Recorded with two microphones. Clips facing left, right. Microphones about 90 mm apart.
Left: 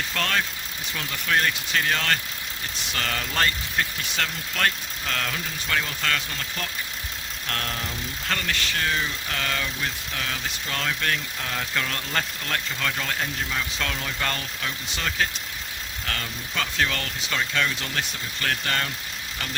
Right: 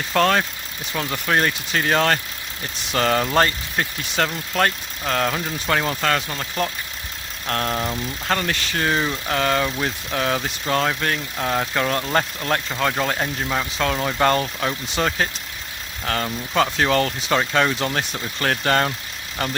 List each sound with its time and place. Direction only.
0.1 s speech: 40° right (ahead or behind)
6.3 s speech: 30° right (ahead or behind); by 10.8 s 45° right (ahead or behind)
10.8 s speech: 30° right (ahead or behind)